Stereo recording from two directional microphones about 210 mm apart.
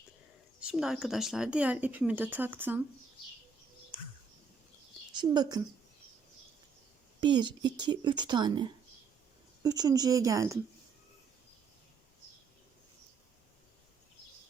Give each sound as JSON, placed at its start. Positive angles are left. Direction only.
{"t": 0.6, "sound": "speech", "side_deg": -5}
{"t": 5.1, "sound": "speech", "side_deg": -20}
{"t": 7.2, "sound": "speech", "side_deg": -20}
{"t": 9.6, "sound": "speech", "side_deg": -20}